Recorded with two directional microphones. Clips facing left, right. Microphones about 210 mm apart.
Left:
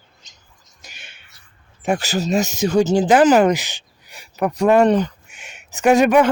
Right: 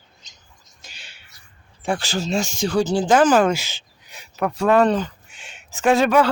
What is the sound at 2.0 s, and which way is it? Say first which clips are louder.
Speech: left 4 dB; 40° left (ahead or behind).